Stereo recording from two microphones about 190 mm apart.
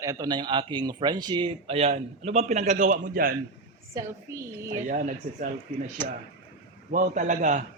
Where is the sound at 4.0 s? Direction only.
15° right (ahead or behind).